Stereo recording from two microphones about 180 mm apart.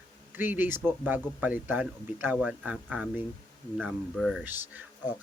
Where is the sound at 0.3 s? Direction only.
10° right (ahead or behind).